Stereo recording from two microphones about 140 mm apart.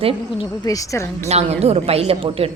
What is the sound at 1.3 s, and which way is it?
A woman's voice, 50° right (ahead or behind).